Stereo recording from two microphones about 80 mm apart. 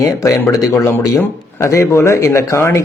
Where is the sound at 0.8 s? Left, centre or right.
Left.